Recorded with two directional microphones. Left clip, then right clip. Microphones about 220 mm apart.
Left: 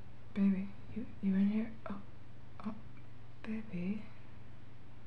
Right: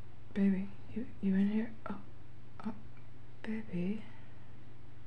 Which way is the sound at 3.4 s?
20° right (ahead or behind).